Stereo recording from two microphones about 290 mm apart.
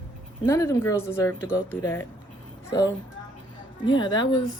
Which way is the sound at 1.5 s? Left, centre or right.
Centre.